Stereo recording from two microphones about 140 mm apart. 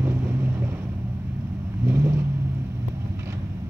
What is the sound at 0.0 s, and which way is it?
Vehicle, 15° right (ahead or behind).